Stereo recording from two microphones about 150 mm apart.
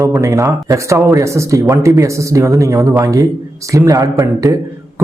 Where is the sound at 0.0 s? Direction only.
20° right (ahead or behind).